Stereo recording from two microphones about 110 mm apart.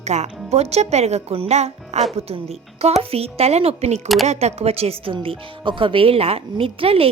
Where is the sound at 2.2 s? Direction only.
65° right (ahead or behind).